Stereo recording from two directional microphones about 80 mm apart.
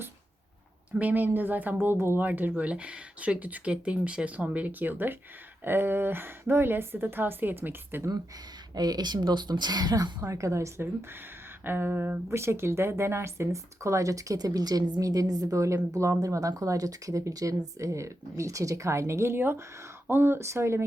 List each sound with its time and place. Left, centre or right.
0.9 s speech: right
8.7 s speech: right
10.2 s speech: right
11.6 s speech: right